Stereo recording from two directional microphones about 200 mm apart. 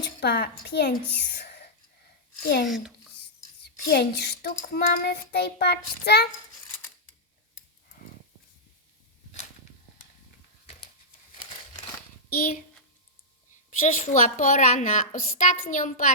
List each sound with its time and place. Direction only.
0.0 s a child's voice: 55° left (ahead or behind)
2.6 s a child's voice: centre (ahead or behind)
3.6 s child singing: 55° left (ahead or behind)
13.7 s a woman's voice: 40° left (ahead or behind)